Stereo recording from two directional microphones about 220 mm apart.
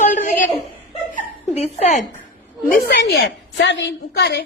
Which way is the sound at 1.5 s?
30° left (ahead or behind).